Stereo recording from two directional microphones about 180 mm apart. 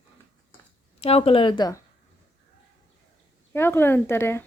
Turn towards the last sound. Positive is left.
turn(degrees=15)  # may be behind; listen again after turning